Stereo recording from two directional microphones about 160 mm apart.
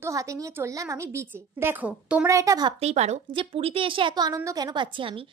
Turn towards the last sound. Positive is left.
turn(degrees=-30)  # may be behind; listen again after turning